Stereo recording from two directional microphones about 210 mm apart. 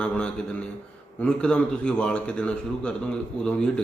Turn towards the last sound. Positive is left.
turn(degrees=5)  # may be behind; listen again after turning